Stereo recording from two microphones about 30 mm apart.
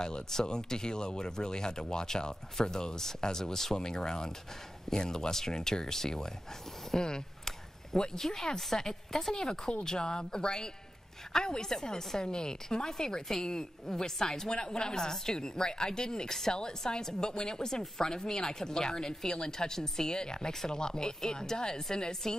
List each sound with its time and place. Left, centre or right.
0.3 s a woman's voice: left
14.5 s a woman's voice: left